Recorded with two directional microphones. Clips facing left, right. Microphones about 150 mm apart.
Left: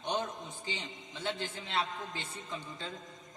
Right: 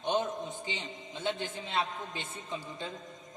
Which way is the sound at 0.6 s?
20° right (ahead or behind).